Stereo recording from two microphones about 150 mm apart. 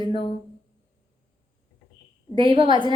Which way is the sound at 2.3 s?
35° right (ahead or behind).